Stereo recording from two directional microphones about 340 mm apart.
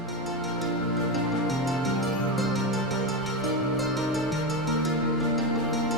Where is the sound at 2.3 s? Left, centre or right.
Centre.